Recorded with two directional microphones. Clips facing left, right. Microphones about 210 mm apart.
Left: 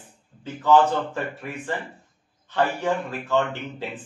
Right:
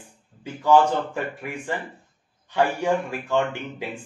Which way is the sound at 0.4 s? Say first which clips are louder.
Even; 10° right (ahead or behind).